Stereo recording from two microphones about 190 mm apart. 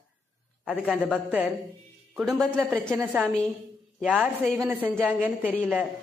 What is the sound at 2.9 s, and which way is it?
A woman's voice, 10° right (ahead or behind).